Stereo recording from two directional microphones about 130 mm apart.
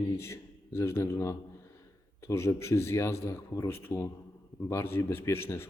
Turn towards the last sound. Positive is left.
turn(degrees=20)  # may be behind; listen again after turning